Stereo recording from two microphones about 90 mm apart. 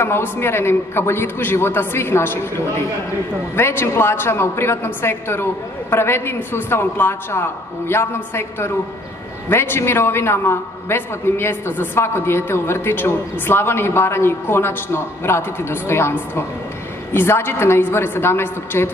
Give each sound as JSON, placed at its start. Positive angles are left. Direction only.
{"t": 0.0, "sound": "a man's voice", "side_deg": 25}
{"t": 3.5, "sound": "a man's voice", "side_deg": 30}